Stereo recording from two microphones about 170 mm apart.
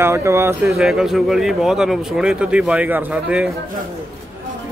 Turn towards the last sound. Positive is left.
turn(degrees=-5)  # may be behind; listen again after turning